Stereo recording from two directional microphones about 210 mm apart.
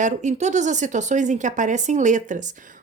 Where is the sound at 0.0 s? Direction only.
35° right (ahead or behind).